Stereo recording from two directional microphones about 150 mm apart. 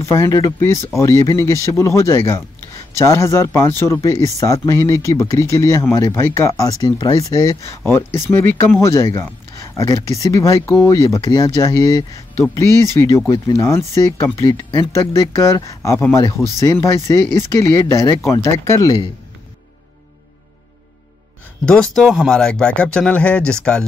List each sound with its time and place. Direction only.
0.0 s speech: 20° left (ahead or behind)
13.3 s speech: 20° left (ahead or behind)
21.6 s speech: 5° left (ahead or behind)